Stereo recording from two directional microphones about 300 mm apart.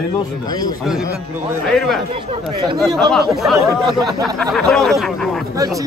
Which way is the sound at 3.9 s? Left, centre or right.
Centre.